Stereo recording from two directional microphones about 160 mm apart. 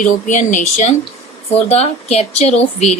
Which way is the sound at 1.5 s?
40° left (ahead or behind).